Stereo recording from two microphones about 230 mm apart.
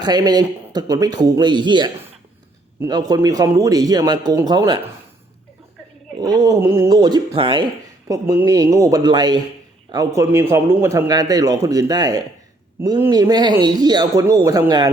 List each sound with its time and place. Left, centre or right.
0.0 s speech: centre
6.1 s speech: centre